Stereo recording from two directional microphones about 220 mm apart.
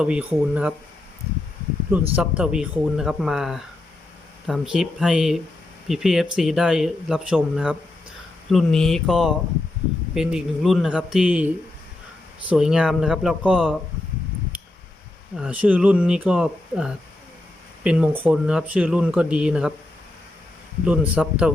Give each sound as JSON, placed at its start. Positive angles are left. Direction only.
{"t": 0.0, "sound": "speech", "side_deg": -5}
{"t": 2.1, "sound": "speech", "side_deg": -5}
{"t": 15.4, "sound": "speech", "side_deg": -5}
{"t": 20.8, "sound": "speech", "side_deg": -5}